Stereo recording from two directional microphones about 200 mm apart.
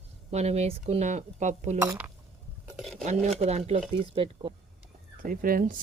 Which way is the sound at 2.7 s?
Centre (ahead or behind).